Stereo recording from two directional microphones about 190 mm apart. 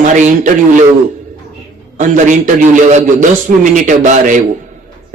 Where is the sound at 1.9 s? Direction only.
40° right (ahead or behind).